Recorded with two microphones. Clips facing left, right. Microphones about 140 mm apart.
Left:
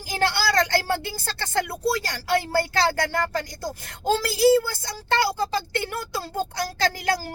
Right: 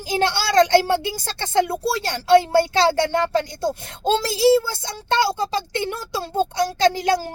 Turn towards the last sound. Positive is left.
turn(degrees=-20)  # may be behind; listen again after turning